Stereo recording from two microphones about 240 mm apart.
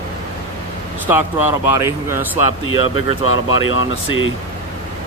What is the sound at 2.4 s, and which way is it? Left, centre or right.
Speech, left.